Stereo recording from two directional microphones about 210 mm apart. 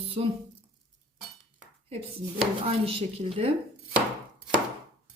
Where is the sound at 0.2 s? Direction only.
30° right (ahead or behind).